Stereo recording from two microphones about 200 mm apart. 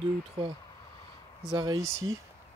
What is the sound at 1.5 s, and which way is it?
Speech, 20° right (ahead or behind).